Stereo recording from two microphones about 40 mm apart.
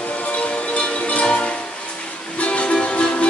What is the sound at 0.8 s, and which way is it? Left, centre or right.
Music, left.